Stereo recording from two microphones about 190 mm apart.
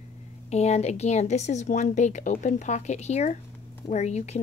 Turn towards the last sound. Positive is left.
turn(degrees=35)  # may be behind; listen again after turning